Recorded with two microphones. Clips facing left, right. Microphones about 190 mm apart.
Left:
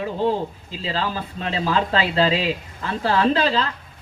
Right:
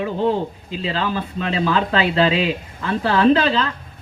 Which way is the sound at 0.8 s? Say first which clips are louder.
Right 3 dB; 35° left (ahead or behind).